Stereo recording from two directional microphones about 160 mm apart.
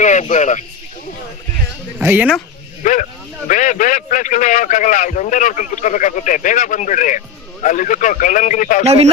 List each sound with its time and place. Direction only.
0.0 s speech: 45° left (ahead or behind)
2.0 s speech: 10° right (ahead or behind)
2.8 s a man's voice: 50° left (ahead or behind)
8.8 s speech: 40° right (ahead or behind)